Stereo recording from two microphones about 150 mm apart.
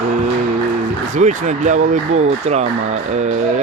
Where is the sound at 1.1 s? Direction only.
55° right (ahead or behind).